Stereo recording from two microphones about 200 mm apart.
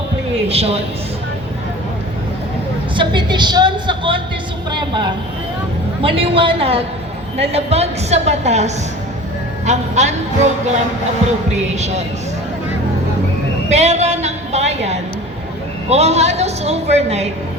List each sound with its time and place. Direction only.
0.4 s a woman's voice: 30° right (ahead or behind)
2.9 s a woman's voice: 25° right (ahead or behind)
4.7 s vehicle: 20° right (ahead or behind)
6.0 s a woman's voice: 25° right (ahead or behind)
11.5 s a woman's voice: 35° right (ahead or behind)
13.7 s a sound: 35° right (ahead or behind)
15.9 s a woman's voice: 30° right (ahead or behind)